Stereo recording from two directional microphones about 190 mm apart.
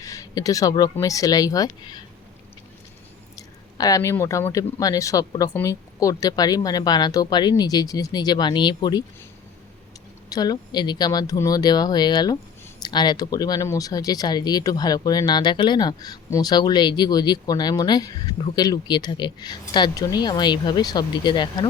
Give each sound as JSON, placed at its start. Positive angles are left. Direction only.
{"t": 0.0, "sound": "speech", "side_deg": 15}
{"t": 3.3, "sound": "speech", "side_deg": 20}
{"t": 10.2, "sound": "speech", "side_deg": 20}